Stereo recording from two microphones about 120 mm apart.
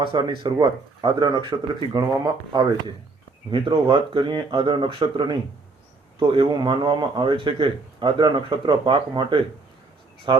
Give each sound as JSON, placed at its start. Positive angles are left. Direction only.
{"t": 0.0, "sound": "a man's voice", "side_deg": -40}